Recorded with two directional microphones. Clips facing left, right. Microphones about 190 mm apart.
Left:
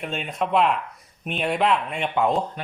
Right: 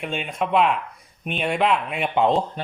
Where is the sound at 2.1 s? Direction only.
25° right (ahead or behind).